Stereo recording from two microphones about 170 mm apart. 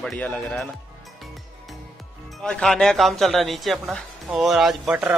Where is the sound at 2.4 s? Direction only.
5° left (ahead or behind).